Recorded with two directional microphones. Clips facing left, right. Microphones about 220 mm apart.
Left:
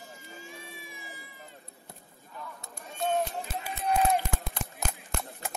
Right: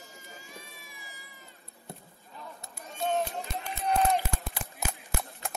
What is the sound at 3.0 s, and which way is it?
Run, 5° left (ahead or behind).